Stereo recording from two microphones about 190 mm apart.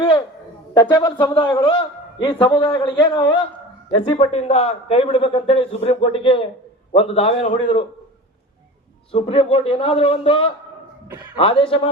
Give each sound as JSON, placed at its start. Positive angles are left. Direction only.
{"t": 0.0, "sound": "a sound", "side_deg": 25}
{"t": 0.7, "sound": "a man's voice", "side_deg": 25}
{"t": 9.1, "sound": "a man's voice", "side_deg": 30}